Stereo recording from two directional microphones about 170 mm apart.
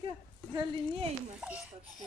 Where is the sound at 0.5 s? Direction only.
30° right (ahead or behind).